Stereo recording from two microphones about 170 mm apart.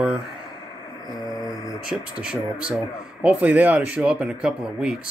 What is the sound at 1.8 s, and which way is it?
Speech, 5° right (ahead or behind).